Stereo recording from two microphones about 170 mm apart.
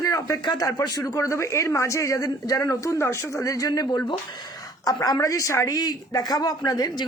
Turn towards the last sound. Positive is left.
turn(degrees=20)  # may be behind; listen again after turning